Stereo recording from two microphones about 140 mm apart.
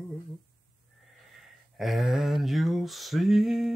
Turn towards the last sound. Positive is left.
turn(degrees=0)  # may be behind; listen again after turning